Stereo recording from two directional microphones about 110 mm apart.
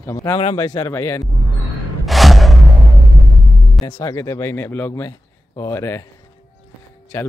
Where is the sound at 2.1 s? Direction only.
Centre (ahead or behind).